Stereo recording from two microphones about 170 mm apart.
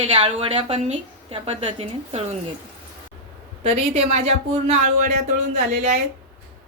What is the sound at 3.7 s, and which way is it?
A woman's voice, 35° right (ahead or behind).